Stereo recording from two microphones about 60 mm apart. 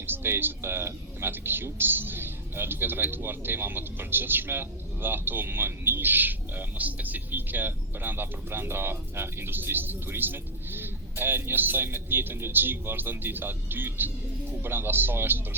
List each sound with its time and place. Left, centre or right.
0.0 s speech: right